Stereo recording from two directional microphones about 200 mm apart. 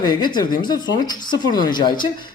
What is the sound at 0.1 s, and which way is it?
Speech, 20° left (ahead or behind).